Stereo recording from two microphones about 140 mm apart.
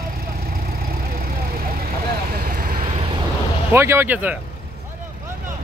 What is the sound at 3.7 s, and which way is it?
Speech, 15° right (ahead or behind).